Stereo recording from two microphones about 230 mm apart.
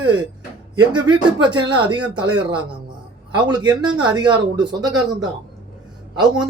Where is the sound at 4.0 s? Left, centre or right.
Centre.